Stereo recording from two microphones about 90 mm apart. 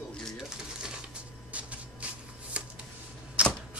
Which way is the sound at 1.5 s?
15° right (ahead or behind).